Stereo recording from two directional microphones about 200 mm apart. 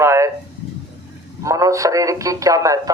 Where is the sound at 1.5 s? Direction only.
15° right (ahead or behind).